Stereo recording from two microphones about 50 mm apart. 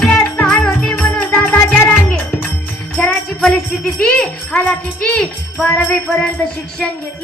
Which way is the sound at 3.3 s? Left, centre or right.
Centre.